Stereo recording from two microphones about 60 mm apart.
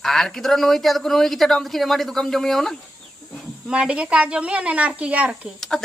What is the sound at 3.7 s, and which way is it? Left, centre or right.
A child's voice, centre.